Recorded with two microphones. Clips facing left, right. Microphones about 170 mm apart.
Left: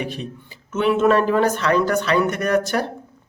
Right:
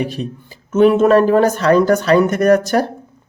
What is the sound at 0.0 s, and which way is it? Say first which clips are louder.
A man's voice: right 6 dB; 40° right (ahead or behind).